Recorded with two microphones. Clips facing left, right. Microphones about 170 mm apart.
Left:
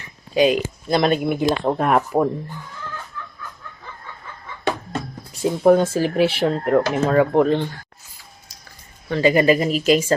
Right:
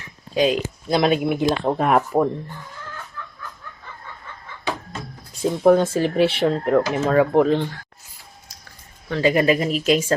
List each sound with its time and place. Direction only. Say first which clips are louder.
0.0 s speech: left 2 dB; centre (ahead or behind)
4.6 s music: left 4 dB; 55° left (ahead or behind)
5.4 s speech: left 1 dB; 5° left (ahead or behind)
9.0 s speech: left 2 dB; centre (ahead or behind)